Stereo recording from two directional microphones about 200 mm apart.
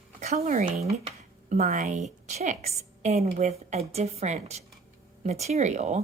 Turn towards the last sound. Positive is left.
turn(degrees=-35)  # may be behind; listen again after turning